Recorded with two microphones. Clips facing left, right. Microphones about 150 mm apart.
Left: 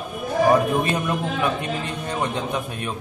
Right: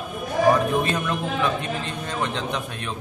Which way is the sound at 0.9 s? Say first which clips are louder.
Left 1 dB; 10° left (ahead or behind).